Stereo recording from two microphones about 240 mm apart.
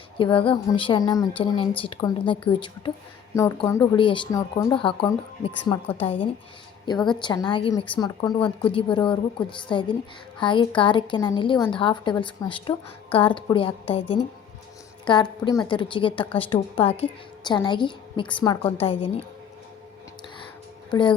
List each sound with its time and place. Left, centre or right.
0.2 s a woman's voice: left
7.2 s a woman's voice: centre
15.0 s a woman's voice: centre